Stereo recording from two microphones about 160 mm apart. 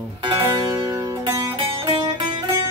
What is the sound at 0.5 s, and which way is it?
Music, 30° right (ahead or behind).